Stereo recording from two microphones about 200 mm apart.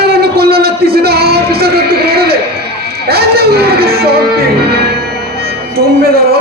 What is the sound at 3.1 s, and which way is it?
Music, 50° right (ahead or behind).